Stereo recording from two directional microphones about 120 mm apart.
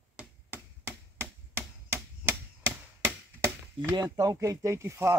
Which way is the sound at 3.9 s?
30° right (ahead or behind).